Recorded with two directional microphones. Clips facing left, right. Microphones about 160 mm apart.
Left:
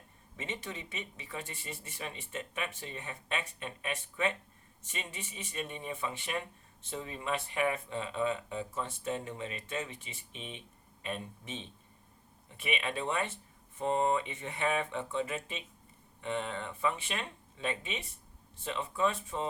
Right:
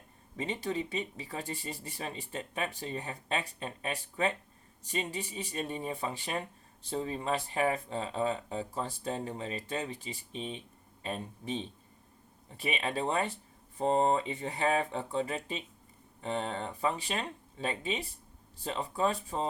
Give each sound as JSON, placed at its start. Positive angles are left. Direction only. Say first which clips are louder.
{"t": 0.3, "sound": "speech", "louder": "right 7 dB", "side_deg": -35}